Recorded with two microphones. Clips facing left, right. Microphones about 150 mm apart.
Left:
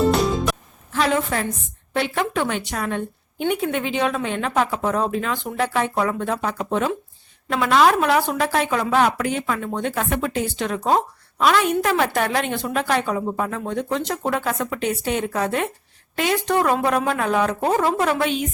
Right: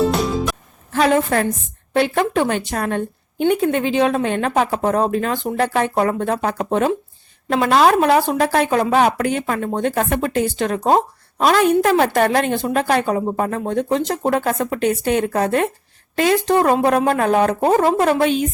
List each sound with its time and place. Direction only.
0.0 s music: centre (ahead or behind)
0.9 s a woman's voice: 45° right (ahead or behind)
17.7 s a woman's voice: 35° right (ahead or behind)